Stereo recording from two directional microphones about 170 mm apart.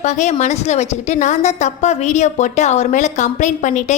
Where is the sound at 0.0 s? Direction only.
45° left (ahead or behind).